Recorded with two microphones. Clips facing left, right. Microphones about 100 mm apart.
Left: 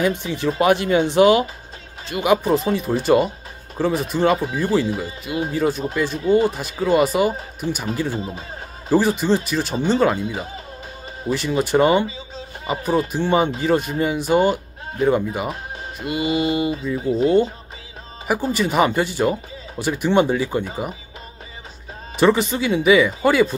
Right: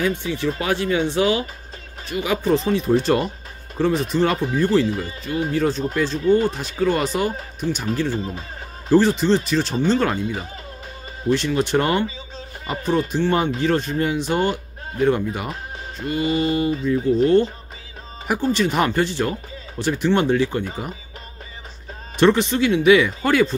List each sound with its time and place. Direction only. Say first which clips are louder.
0.0 s speech: left 1 dB; 20° left (ahead or behind)
2.5 s speech: right 1 dB; 5° left (ahead or behind)
22.1 s speech: even; 5° left (ahead or behind)